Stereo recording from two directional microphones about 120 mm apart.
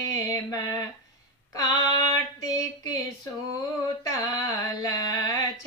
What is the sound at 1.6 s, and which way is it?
Female singing, 30° left (ahead or behind).